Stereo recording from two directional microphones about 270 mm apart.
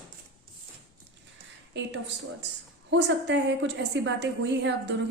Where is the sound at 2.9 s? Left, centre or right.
Right.